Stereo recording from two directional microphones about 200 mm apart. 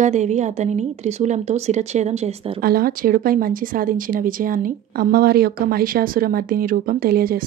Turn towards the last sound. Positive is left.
turn(degrees=-45)  # may be behind; listen again after turning